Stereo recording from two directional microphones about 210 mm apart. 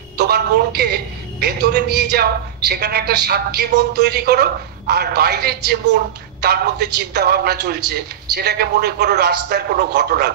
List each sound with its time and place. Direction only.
0.2 s a woman's voice: 50° right (ahead or behind)